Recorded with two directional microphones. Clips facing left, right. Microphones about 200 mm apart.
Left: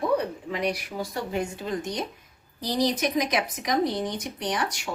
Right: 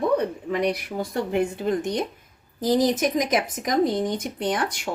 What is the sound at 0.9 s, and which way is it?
A woman's voice, 55° right (ahead or behind).